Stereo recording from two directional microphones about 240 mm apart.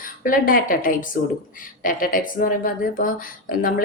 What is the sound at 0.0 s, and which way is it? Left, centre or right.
A woman's voice, left.